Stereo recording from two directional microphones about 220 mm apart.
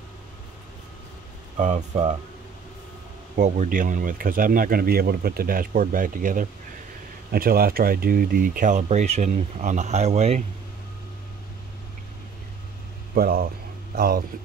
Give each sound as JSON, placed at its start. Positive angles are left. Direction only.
{"t": 1.6, "sound": "speech", "side_deg": -30}
{"t": 3.3, "sound": "speech", "side_deg": -35}
{"t": 13.1, "sound": "speech", "side_deg": -40}